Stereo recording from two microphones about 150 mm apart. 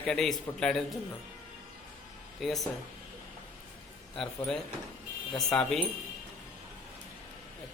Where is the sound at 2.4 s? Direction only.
Centre (ahead or behind).